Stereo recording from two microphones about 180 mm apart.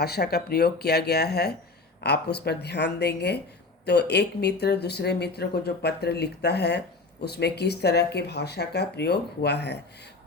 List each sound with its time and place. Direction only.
0.0 s speech: 60° left (ahead or behind)